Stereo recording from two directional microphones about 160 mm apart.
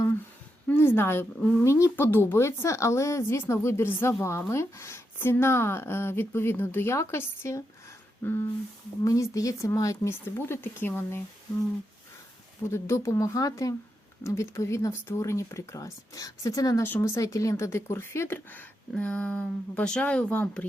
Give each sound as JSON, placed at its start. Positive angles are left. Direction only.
{"t": 0.7, "sound": "a woman's voice", "side_deg": 15}
{"t": 12.6, "sound": "a woman's voice", "side_deg": 15}